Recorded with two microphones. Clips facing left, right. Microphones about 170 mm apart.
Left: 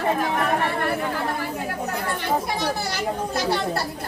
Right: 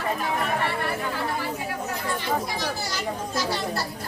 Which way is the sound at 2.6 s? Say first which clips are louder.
Left 4 dB; 60° left (ahead or behind).